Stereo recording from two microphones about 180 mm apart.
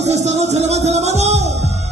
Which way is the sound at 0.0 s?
40° right (ahead or behind).